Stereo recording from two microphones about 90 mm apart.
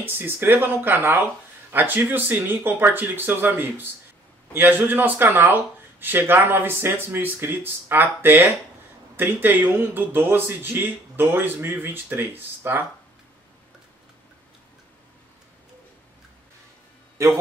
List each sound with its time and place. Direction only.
0.0 s speech: 25° right (ahead or behind)